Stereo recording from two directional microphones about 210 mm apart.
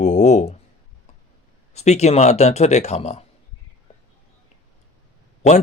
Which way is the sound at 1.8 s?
30° left (ahead or behind).